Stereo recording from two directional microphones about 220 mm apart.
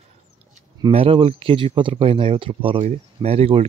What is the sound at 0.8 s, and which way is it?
Speech, 25° right (ahead or behind).